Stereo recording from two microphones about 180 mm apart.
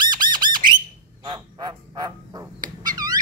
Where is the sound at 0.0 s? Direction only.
25° right (ahead or behind).